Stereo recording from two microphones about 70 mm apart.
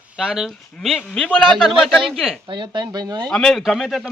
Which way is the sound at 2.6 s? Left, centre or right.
Right.